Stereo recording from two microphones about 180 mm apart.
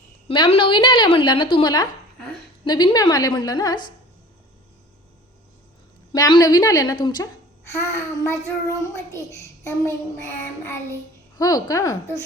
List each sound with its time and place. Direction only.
0.3 s a woman's voice: 30° left (ahead or behind)
6.1 s a woman's voice: 20° left (ahead or behind)
9.6 s child singing: 15° left (ahead or behind)
11.3 s a woman's voice: 20° left (ahead or behind)